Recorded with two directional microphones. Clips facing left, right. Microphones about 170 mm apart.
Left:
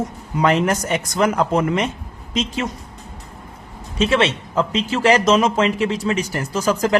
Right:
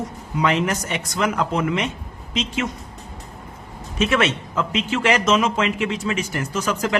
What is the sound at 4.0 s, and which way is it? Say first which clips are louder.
Speech: left 2 dB; 30° left (ahead or behind).